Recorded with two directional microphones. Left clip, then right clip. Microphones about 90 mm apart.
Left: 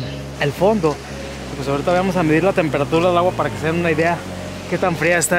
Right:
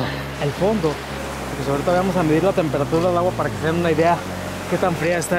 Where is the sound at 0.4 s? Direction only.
20° right (ahead or behind).